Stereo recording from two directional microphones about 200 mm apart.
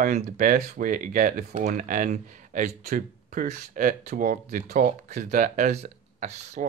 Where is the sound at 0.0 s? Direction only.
45° right (ahead or behind).